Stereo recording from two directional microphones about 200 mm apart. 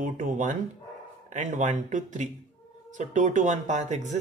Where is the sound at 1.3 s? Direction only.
40° right (ahead or behind).